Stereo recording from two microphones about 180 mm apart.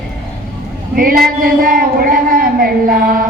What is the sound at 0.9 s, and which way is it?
A man's voice, 50° right (ahead or behind).